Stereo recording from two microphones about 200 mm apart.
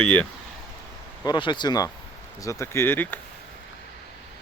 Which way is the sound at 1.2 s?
20° left (ahead or behind).